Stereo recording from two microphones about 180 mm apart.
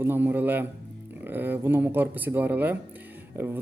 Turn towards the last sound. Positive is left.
turn(degrees=-10)  # may be behind; listen again after turning